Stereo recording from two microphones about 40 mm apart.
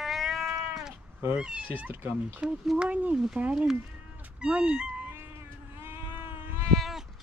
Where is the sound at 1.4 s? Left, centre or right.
Right.